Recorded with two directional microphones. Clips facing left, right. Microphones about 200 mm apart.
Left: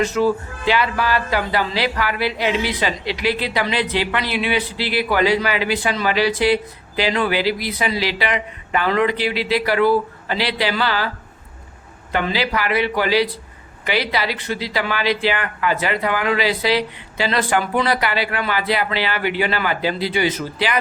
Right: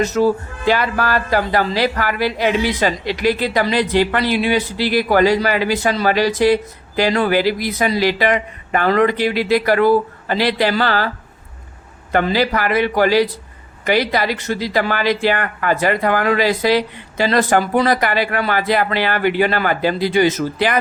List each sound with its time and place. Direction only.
0.0 s speech: 40° right (ahead or behind)
12.1 s speech: 45° right (ahead or behind)